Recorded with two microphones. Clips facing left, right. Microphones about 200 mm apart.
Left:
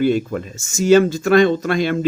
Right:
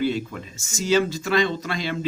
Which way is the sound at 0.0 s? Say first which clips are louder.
Left 7 dB; 50° left (ahead or behind).